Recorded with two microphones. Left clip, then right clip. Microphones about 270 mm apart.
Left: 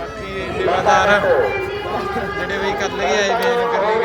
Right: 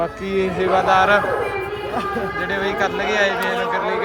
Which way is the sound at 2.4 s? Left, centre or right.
Centre.